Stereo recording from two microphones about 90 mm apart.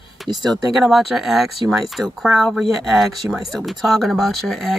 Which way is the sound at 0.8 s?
Centre (ahead or behind).